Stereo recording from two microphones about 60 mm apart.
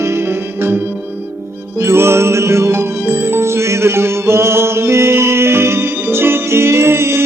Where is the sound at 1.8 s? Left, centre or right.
Right.